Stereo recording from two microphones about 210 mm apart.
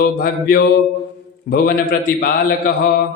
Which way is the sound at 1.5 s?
45° left (ahead or behind).